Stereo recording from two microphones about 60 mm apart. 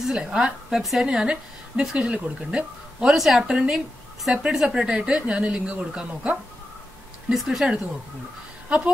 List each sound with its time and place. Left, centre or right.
0.0 s a woman's voice: centre
1.2 s a woman's voice: centre
3.2 s a woman's voice: centre
7.3 s a woman's voice: centre
8.6 s speech: right